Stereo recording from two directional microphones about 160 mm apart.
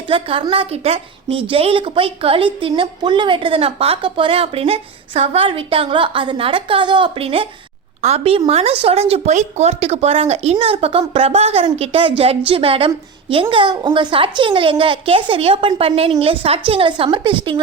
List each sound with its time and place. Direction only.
0.1 s a woman's voice: 35° right (ahead or behind)